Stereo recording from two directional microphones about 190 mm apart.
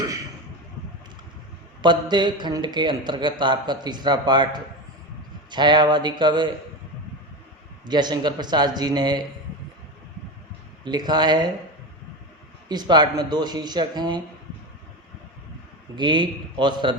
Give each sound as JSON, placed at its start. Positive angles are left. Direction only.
{"t": 1.8, "sound": "a man's voice", "side_deg": -25}
{"t": 7.9, "sound": "a man's voice", "side_deg": -20}
{"t": 10.8, "sound": "a man's voice", "side_deg": -20}
{"t": 12.6, "sound": "a man's voice", "side_deg": -20}
{"t": 16.0, "sound": "a man's voice", "side_deg": -25}